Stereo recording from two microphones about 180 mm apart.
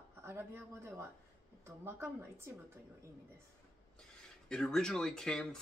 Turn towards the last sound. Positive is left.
turn(degrees=5)  # may be behind; listen again after turning